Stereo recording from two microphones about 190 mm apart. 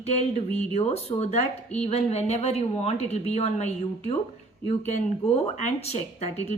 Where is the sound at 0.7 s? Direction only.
35° left (ahead or behind).